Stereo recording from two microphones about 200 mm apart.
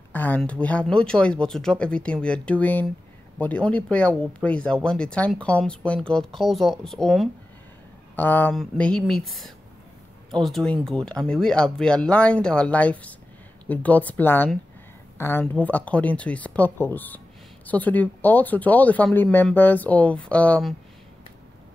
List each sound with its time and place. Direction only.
0.1 s speech: 10° left (ahead or behind)